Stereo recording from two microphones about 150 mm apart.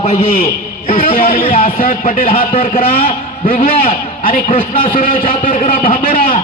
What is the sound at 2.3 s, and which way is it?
A man's voice, 40° left (ahead or behind).